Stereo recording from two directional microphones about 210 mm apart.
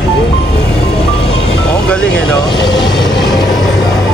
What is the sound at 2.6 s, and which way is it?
Vehicle, 20° left (ahead or behind).